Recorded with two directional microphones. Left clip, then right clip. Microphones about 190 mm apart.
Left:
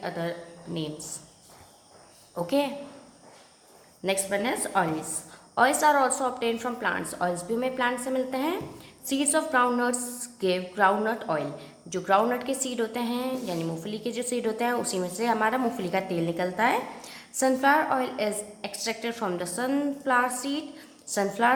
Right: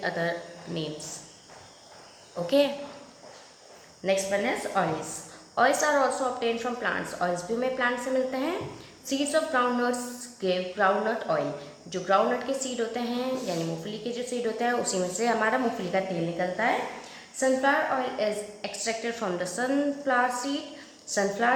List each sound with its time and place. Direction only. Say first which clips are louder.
0.0 s speech: right 3 dB; 15° left (ahead or behind)
2.5 s a woman's voice: right 4 dB; 20° left (ahead or behind)
4.0 s a woman's voice: right 1 dB; 20° left (ahead or behind)
18.6 s a woman's voice: even; 15° left (ahead or behind)